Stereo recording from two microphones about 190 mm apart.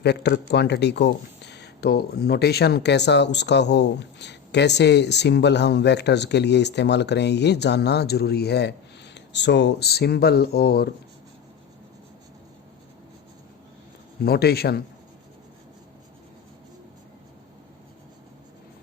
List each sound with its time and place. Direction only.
0.0 s speech: 60° left (ahead or behind)
14.3 s speech: 55° left (ahead or behind)